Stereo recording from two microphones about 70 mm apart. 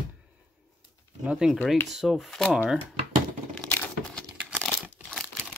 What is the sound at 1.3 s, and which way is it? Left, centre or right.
Speech, centre.